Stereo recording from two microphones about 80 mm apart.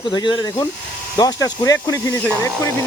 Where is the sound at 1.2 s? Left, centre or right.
Left.